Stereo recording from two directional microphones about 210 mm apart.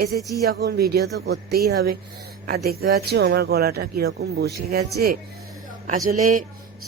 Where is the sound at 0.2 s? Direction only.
Centre (ahead or behind).